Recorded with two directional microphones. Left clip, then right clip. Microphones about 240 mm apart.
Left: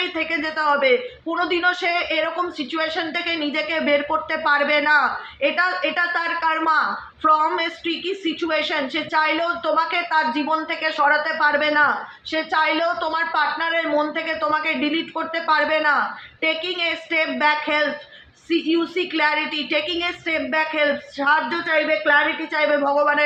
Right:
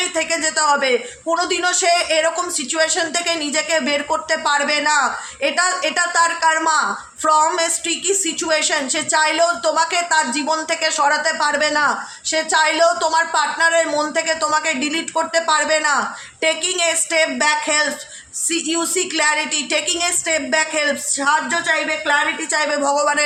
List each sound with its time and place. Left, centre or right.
0.2 s speech: right